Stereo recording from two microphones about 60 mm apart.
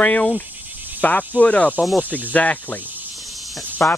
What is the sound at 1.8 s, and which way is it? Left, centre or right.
Speech, centre.